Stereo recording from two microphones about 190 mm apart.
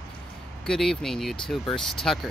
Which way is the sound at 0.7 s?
Centre (ahead or behind).